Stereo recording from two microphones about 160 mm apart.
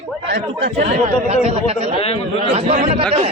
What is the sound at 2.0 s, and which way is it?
Speech, 35° left (ahead or behind).